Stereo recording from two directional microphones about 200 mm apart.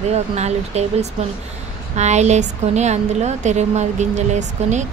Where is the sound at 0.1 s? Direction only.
35° right (ahead or behind).